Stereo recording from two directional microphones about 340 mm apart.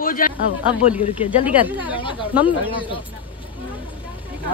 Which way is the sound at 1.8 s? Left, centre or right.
Centre.